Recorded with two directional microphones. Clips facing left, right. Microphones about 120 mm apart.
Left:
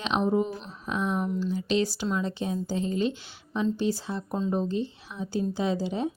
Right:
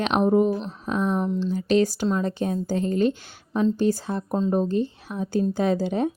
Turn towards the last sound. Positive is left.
turn(degrees=-55)  # may be behind; listen again after turning